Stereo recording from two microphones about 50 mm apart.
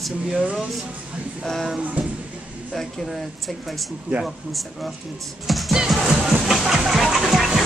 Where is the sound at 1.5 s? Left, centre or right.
Centre.